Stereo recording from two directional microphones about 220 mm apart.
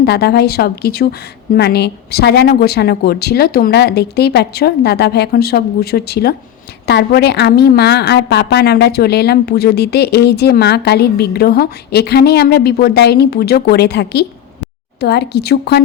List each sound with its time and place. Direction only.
0.0 s a woman's voice: 45° left (ahead or behind)